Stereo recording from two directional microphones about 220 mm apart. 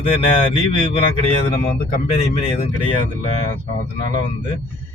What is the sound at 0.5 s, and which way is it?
Speech, 25° left (ahead or behind).